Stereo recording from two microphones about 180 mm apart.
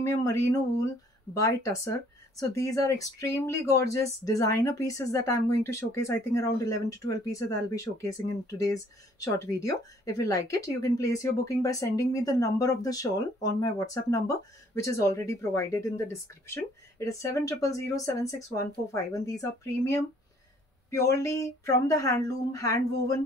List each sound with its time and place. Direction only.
0.0 s speech: 15° left (ahead or behind)